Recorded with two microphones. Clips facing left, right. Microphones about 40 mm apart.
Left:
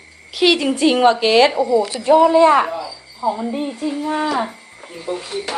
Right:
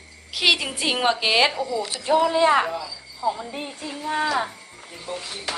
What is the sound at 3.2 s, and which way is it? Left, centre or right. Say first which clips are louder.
Speech: left 6 dB; left.